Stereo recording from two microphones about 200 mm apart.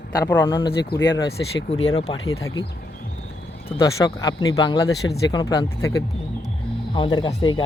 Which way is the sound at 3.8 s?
15° left (ahead or behind).